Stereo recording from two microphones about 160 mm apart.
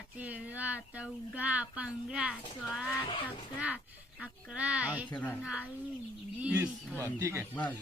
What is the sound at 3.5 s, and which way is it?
Speech, 10° right (ahead or behind).